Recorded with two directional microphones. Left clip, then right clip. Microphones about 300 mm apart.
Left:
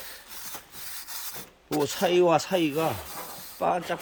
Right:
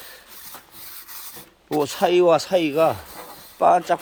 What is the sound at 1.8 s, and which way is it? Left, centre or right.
Speech, centre.